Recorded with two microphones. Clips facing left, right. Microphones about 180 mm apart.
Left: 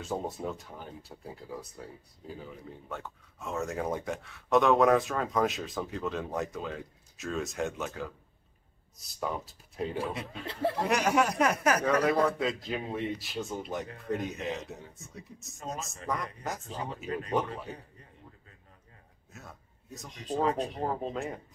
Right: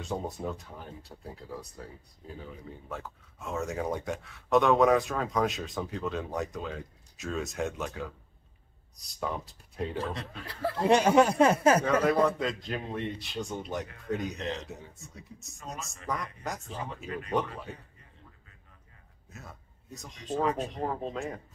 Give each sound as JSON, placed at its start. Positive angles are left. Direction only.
{"t": 0.0, "sound": "speech", "side_deg": 0}
{"t": 10.4, "sound": "speech", "side_deg": 25}
{"t": 10.9, "sound": "speech", "side_deg": -30}
{"t": 11.8, "sound": "speech", "side_deg": 0}
{"t": 19.3, "sound": "speech", "side_deg": 0}
{"t": 20.4, "sound": "speech", "side_deg": 35}
{"t": 20.7, "sound": "speech", "side_deg": 5}